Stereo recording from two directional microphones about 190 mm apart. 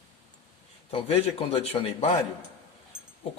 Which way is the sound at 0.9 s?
30° left (ahead or behind).